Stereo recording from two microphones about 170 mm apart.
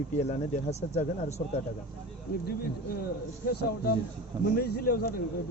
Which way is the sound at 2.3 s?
70° left (ahead or behind).